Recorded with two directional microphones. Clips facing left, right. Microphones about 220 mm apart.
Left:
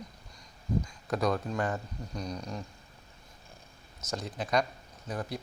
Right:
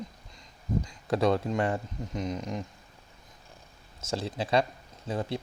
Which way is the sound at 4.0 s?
30° right (ahead or behind).